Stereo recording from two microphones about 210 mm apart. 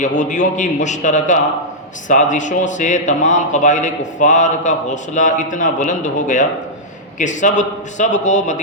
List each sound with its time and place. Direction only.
0.2 s a man's voice: 35° left (ahead or behind)